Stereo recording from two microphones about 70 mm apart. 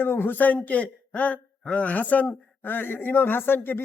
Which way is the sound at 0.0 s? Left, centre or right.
Left.